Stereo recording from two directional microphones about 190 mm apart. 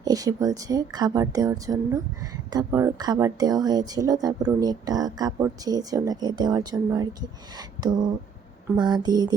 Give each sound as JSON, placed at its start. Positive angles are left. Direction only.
{"t": 0.0, "sound": "speech", "side_deg": -20}